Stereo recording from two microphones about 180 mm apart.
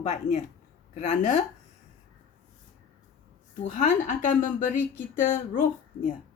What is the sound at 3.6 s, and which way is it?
A woman's voice, 40° left (ahead or behind).